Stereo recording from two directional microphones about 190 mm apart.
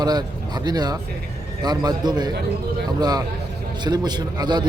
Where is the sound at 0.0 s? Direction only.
20° right (ahead or behind).